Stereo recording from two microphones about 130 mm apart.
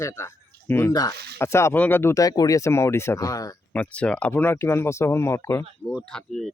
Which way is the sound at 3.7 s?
10° left (ahead or behind).